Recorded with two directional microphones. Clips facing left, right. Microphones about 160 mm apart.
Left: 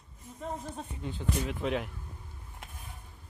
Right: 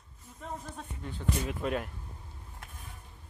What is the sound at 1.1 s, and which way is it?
Speech, centre (ahead or behind).